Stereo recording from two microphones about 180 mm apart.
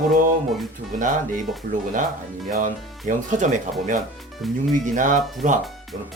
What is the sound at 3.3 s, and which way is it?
Speech, 45° right (ahead or behind).